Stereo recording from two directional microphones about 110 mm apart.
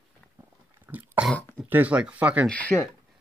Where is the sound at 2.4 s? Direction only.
10° left (ahead or behind).